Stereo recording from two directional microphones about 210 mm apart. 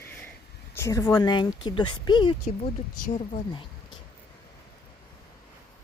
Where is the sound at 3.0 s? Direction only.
35° left (ahead or behind).